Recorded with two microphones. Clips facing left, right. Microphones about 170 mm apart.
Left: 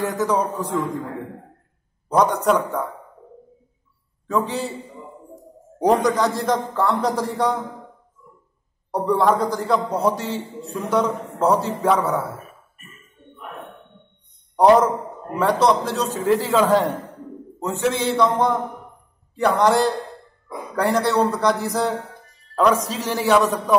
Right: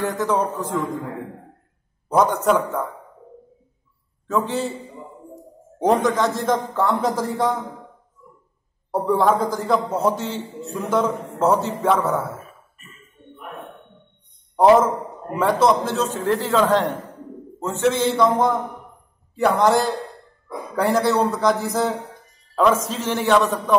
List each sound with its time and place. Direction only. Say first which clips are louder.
0.1 s a man's voice: even; centre (ahead or behind)
2.0 s a man's voice: even; centre (ahead or behind)
4.3 s a man's voice: right 1 dB; centre (ahead or behind)
8.9 s a man's voice: even; centre (ahead or behind)
14.6 s a man's voice: even; 5° right (ahead or behind)